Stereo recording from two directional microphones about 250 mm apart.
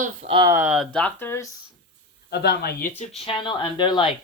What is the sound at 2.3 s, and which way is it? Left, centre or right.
Speech, left.